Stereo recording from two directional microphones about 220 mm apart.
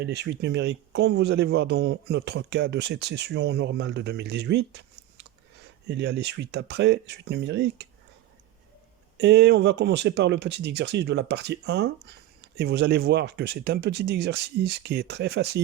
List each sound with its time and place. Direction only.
0.0 s speech: 50° right (ahead or behind)
9.1 s speech: 50° right (ahead or behind)